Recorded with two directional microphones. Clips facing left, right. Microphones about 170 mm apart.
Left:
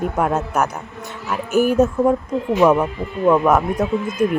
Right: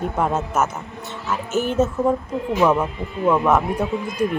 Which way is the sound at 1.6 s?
10° left (ahead or behind).